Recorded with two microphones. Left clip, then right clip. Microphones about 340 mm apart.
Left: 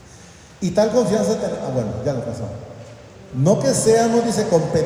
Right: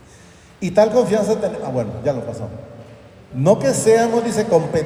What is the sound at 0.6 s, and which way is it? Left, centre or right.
A man's voice, right.